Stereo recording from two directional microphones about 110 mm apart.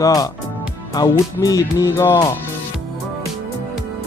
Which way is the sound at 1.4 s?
30° left (ahead or behind).